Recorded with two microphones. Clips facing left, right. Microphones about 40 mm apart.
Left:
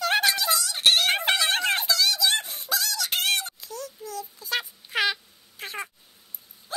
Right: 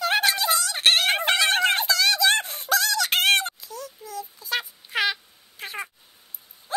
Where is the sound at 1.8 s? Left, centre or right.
Right.